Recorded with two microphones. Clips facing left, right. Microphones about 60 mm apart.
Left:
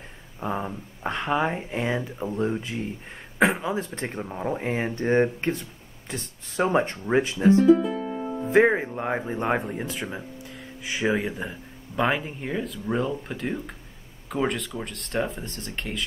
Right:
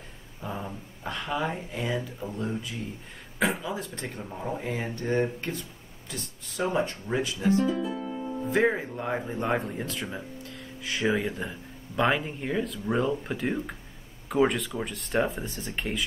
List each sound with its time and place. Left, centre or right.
0.4 s a sound: left
0.7 s speech: left
7.6 s music: left
8.4 s speech: left; by 16.0 s centre